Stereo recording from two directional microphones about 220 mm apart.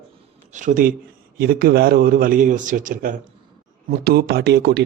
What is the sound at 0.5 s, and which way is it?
A man's voice, 35° right (ahead or behind).